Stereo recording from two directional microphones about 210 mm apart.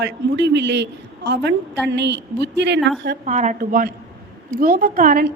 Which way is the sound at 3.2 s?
35° right (ahead or behind).